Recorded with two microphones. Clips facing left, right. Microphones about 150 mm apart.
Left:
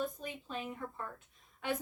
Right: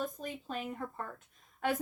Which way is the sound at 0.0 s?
45° right (ahead or behind).